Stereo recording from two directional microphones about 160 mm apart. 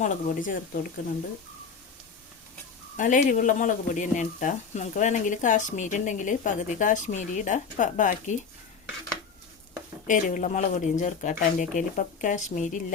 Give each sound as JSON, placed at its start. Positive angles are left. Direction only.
{"t": 0.0, "sound": "speech", "side_deg": 55}
{"t": 3.0, "sound": "speech", "side_deg": 55}
{"t": 10.1, "sound": "speech", "side_deg": 55}